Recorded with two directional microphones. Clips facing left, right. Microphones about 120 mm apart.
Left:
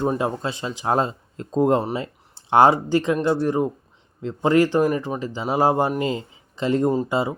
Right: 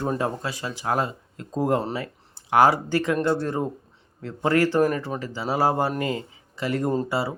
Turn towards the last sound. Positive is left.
turn(degrees=20)  # may be behind; listen again after turning